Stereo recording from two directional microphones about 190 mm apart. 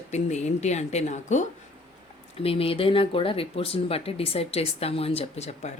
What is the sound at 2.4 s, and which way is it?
Speech, 30° left (ahead or behind).